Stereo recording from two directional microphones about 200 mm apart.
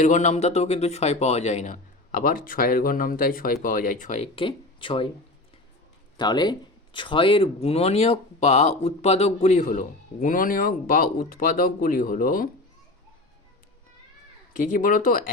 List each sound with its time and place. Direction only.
0.0 s speech: 35° left (ahead or behind)
6.1 s speech: 20° left (ahead or behind); by 12.5 s 45° left (ahead or behind)
14.7 s speech: 45° left (ahead or behind)